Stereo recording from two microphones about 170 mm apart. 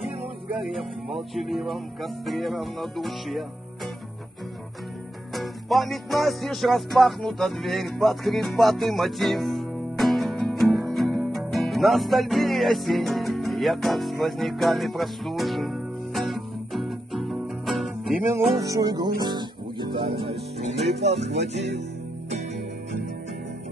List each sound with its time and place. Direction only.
0.6 s music: centre (ahead or behind)
5.3 s music: centre (ahead or behind)
18.6 s music: 20° right (ahead or behind); by 21.3 s 40° right (ahead or behind)